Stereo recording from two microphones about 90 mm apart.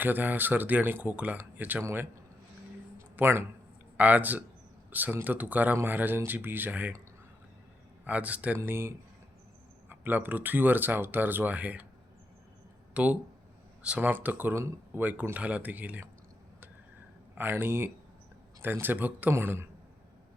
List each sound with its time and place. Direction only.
0.0 s speech: 20° right (ahead or behind)
3.2 s a man's voice: 25° right (ahead or behind)
8.0 s speech: 15° right (ahead or behind)
8.5 s speech: 25° right (ahead or behind)
12.9 s speech: 15° right (ahead or behind)
17.3 s speech: 25° right (ahead or behind)